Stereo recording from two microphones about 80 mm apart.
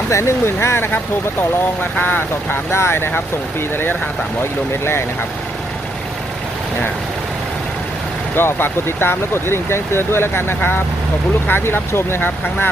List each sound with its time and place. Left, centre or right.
0.1 s speech: left
8.4 s speech: left